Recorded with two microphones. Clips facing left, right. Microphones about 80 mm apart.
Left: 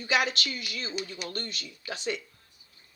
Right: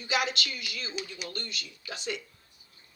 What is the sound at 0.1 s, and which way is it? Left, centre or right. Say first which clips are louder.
A woman's voice: left 2 dB; left.